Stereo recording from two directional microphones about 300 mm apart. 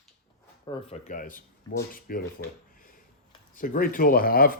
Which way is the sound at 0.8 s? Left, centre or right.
Left.